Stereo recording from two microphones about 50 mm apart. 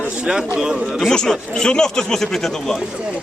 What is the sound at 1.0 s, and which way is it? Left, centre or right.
A man's voice, centre.